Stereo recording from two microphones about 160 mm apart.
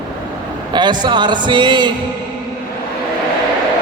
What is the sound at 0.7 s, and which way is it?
A man's voice, 30° right (ahead or behind).